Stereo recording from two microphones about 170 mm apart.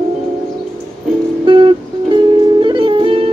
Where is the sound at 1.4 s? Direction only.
30° right (ahead or behind).